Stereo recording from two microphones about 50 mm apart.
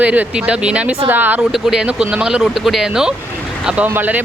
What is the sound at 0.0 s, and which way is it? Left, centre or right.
Speech, right.